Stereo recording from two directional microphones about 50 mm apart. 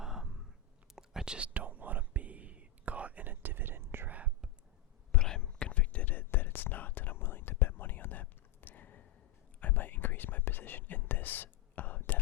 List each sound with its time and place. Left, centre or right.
0.0 s a sound: centre
0.9 s whispering: centre
1.5 s whispering: right
5.1 s whispering: centre; by 12.2 s left